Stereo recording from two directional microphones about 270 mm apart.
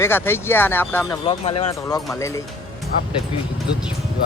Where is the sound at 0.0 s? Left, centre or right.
Centre.